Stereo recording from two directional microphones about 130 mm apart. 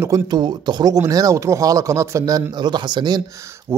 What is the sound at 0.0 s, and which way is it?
Speech, 30° right (ahead or behind).